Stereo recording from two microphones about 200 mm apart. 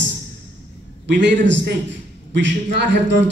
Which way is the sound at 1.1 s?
60° right (ahead or behind).